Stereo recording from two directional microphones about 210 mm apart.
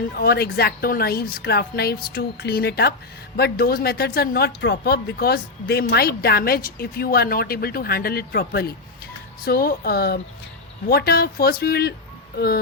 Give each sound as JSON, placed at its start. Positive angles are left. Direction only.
{"t": 0.1, "sound": "speech", "side_deg": 45}